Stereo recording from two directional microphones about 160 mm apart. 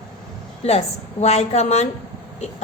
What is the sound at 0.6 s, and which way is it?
A woman's voice, 40° left (ahead or behind).